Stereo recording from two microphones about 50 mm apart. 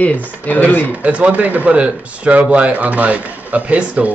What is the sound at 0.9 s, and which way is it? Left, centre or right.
Speech, right.